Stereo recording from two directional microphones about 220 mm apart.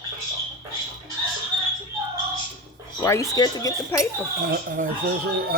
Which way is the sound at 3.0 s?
15° left (ahead or behind).